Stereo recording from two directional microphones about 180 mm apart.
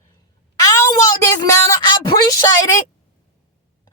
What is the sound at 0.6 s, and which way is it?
Speech, 20° left (ahead or behind).